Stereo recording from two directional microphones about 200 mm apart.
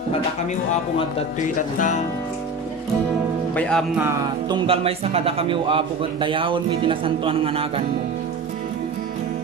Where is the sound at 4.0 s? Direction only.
15° right (ahead or behind).